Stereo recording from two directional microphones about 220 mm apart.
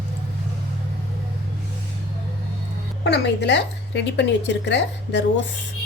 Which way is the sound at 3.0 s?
50° left (ahead or behind).